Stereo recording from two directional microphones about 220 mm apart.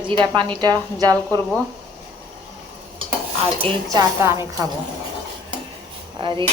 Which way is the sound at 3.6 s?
15° right (ahead or behind).